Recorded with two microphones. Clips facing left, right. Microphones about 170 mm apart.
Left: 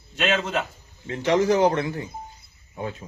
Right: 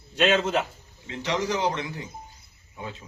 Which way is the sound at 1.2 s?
50° left (ahead or behind).